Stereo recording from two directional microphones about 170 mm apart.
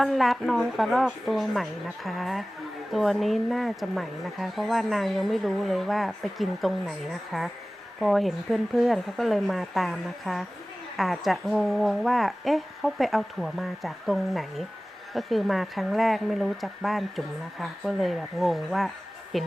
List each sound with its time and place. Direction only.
0.0 s a woman's voice: centre (ahead or behind)